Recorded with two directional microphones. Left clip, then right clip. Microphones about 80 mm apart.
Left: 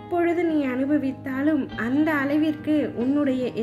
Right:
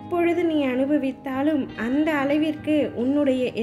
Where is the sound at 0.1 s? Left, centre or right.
Right.